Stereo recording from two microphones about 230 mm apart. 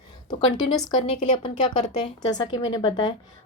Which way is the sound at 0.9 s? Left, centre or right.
Left.